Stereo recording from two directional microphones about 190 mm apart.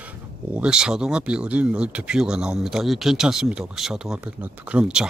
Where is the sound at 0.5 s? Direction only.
5° right (ahead or behind).